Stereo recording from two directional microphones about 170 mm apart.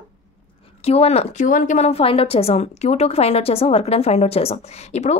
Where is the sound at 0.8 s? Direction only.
35° left (ahead or behind).